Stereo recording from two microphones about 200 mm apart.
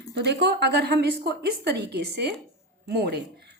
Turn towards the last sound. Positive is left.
turn(degrees=-55)  # may be behind; listen again after turning